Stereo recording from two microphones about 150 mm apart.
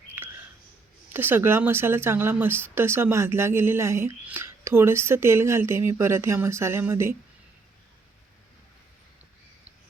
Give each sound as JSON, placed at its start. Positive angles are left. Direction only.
{"t": 1.1, "sound": "speech", "side_deg": -15}